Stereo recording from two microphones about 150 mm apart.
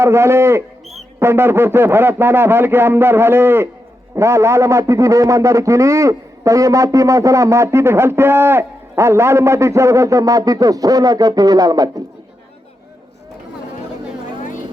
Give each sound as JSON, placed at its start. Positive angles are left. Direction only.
{"t": 0.0, "sound": "a man's voice", "side_deg": -15}